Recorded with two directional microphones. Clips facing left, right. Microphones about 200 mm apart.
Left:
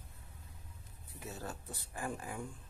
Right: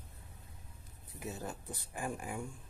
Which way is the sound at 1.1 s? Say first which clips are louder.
Right 2 dB; 15° right (ahead or behind).